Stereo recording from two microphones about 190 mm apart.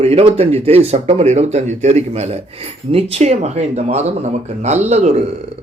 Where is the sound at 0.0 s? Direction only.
30° right (ahead or behind).